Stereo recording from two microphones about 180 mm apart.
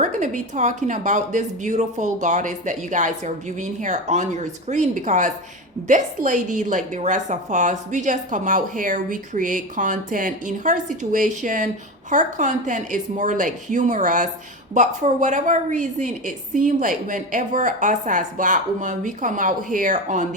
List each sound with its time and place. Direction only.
0.0 s a woman's voice: 45° right (ahead or behind)